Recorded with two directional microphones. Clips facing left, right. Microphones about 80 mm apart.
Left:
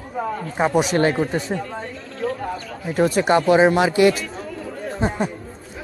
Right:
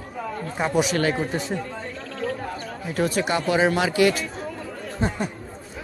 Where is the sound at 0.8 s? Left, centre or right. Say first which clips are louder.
Left 4 dB; left.